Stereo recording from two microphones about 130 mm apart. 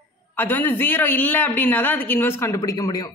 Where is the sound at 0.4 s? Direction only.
15° left (ahead or behind).